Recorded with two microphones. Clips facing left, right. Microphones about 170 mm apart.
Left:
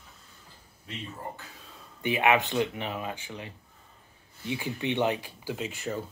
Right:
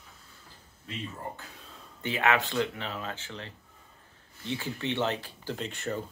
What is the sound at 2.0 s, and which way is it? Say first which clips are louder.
Speech: left 3 dB; 15° left (ahead or behind).